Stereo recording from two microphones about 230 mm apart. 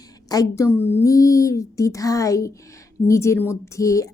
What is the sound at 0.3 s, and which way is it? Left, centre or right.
Speech, centre.